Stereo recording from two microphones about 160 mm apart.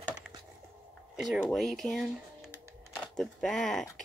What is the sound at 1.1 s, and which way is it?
Speech, 5° right (ahead or behind).